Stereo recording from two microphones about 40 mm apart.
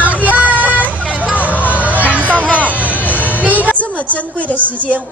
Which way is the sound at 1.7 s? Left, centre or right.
Right.